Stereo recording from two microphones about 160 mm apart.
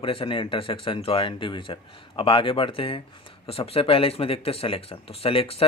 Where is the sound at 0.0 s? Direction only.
35° left (ahead or behind).